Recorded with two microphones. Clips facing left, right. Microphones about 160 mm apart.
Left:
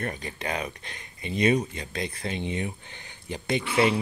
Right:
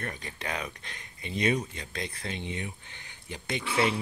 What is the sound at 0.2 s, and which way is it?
Speech, 10° left (ahead or behind).